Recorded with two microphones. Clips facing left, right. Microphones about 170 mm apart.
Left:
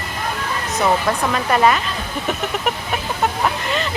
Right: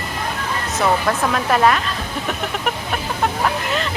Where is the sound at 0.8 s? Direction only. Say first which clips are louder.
Even; centre (ahead or behind).